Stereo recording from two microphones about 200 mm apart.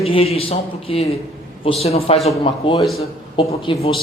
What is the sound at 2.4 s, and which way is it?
A man's voice, 25° left (ahead or behind).